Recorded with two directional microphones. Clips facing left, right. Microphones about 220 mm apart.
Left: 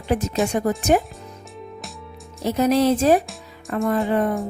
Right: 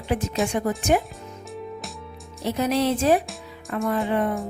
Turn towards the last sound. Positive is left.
turn(degrees=45)  # may be behind; listen again after turning